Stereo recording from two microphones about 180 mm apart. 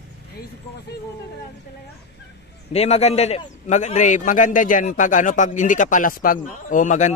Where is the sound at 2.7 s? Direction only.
35° left (ahead or behind).